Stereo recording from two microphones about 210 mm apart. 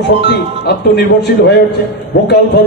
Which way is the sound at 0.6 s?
55° left (ahead or behind).